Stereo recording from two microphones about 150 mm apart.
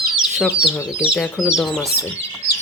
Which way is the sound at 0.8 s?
5° right (ahead or behind).